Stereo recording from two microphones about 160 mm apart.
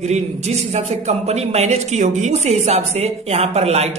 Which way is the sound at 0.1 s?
45° right (ahead or behind).